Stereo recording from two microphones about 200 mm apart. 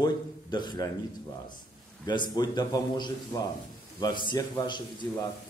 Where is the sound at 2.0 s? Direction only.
20° left (ahead or behind).